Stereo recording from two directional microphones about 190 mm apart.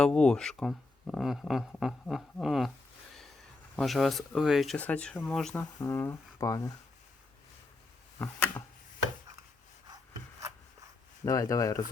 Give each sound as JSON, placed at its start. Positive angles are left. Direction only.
{"t": 0.0, "sound": "speech", "side_deg": 5}
{"t": 3.8, "sound": "speech", "side_deg": 0}
{"t": 8.2, "sound": "speech", "side_deg": 10}
{"t": 11.3, "sound": "speech", "side_deg": 15}